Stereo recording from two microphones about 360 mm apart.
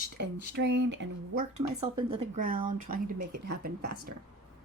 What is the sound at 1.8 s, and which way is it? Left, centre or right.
A woman's voice, centre.